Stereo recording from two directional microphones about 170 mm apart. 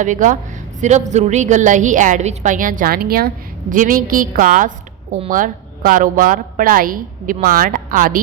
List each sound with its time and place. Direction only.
0.0 s a woman's voice: 50° right (ahead or behind)